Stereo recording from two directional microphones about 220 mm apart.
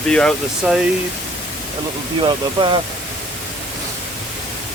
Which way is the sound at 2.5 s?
20° right (ahead or behind).